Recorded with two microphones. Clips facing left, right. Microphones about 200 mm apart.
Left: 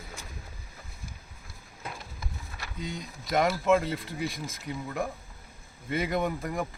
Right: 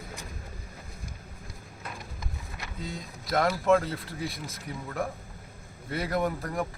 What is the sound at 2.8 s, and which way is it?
Speech, centre (ahead or behind).